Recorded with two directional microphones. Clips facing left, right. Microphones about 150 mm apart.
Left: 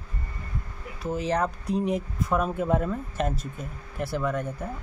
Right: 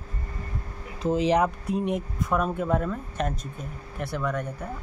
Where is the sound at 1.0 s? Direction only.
20° right (ahead or behind).